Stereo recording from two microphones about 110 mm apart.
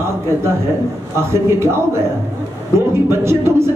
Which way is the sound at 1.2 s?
25° right (ahead or behind).